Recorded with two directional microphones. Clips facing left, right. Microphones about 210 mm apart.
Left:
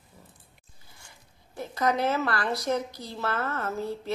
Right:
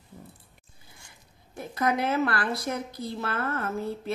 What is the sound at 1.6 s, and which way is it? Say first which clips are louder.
Speech: left 1 dB; 55° right (ahead or behind).